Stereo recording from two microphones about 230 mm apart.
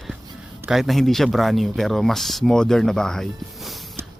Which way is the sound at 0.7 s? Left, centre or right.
Centre.